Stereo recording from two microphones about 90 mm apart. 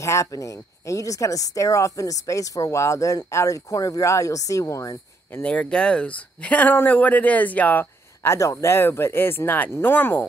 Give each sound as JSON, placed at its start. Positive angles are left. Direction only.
{"t": 0.0, "sound": "speech", "side_deg": 35}
{"t": 5.4, "sound": "speech", "side_deg": 10}